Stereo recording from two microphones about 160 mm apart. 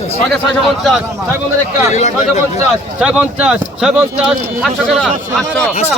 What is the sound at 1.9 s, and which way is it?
Speech, 45° left (ahead or behind).